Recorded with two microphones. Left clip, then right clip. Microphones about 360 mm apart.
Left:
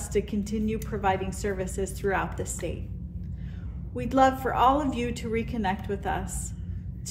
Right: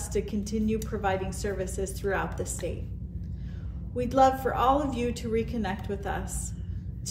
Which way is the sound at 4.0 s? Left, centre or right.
Left.